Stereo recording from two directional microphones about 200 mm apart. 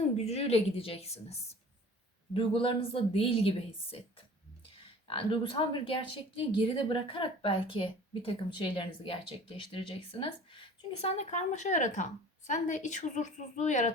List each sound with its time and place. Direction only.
0.3 s a woman's voice: 30° left (ahead or behind)
5.0 s a woman's voice: 25° left (ahead or behind)